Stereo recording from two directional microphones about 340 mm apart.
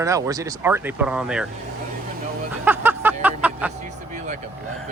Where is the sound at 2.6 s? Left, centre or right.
Centre.